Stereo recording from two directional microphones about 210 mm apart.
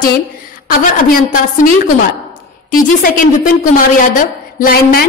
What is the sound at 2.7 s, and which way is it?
A woman's voice, 40° left (ahead or behind).